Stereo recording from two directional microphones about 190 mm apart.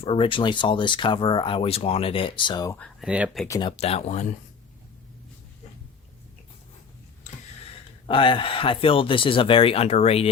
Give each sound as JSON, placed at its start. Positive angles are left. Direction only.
{"t": 0.0, "sound": "speech", "side_deg": 30}
{"t": 2.7, "sound": "speech", "side_deg": 5}
{"t": 3.1, "sound": "speech", "side_deg": -5}
{"t": 3.4, "sound": "speech", "side_deg": 15}
{"t": 3.7, "sound": "speech", "side_deg": 35}
{"t": 8.0, "sound": "speech", "side_deg": 25}